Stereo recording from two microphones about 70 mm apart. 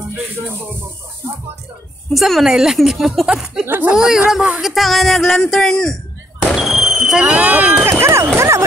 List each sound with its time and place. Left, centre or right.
2.1 s speech: centre
3.6 s speech: right
3.9 s a man's voice: centre
6.5 s speech: centre; by 7.9 s right
8.0 s speech: right